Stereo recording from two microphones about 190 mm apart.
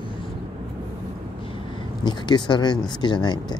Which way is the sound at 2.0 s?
25° left (ahead or behind).